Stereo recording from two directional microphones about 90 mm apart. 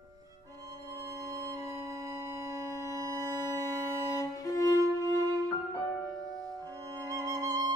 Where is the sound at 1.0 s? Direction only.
35° right (ahead or behind).